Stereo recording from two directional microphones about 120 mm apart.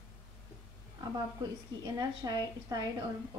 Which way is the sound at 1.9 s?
35° right (ahead or behind).